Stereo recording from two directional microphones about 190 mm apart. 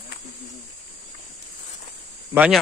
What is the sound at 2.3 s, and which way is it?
Speech, 5° right (ahead or behind).